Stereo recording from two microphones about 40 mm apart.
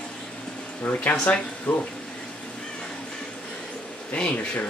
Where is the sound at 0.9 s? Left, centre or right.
Left.